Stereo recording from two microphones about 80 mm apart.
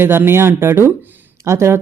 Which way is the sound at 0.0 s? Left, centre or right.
Right.